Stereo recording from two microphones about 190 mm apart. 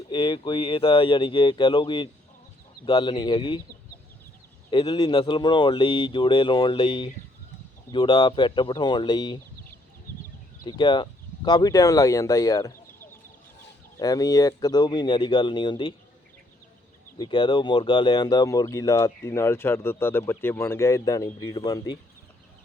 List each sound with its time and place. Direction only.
0.1 s speech: 25° left (ahead or behind)
4.7 s speech: 25° left (ahead or behind)
10.7 s speech: 25° left (ahead or behind)
17.2 s speech: 25° left (ahead or behind)